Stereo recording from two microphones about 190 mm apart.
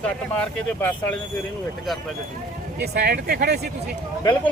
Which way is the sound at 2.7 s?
55° right (ahead or behind).